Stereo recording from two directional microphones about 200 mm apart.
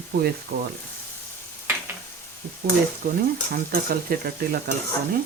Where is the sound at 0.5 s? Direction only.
50° right (ahead or behind).